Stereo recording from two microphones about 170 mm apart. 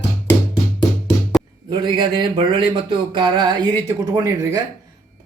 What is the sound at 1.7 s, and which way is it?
Speech, 25° right (ahead or behind).